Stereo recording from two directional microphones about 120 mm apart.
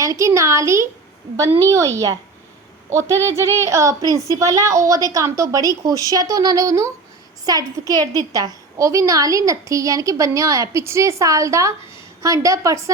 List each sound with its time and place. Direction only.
0.0 s a woman's voice: 25° right (ahead or behind)